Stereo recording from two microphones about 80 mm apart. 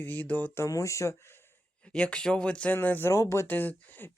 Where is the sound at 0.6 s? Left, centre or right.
Left.